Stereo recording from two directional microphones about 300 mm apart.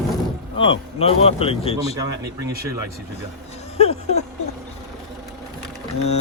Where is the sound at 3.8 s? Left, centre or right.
Left.